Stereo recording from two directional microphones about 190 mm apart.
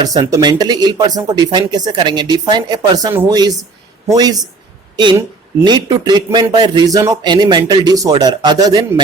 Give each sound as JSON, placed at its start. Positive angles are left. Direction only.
{"t": 0.0, "sound": "a woman's voice", "side_deg": -20}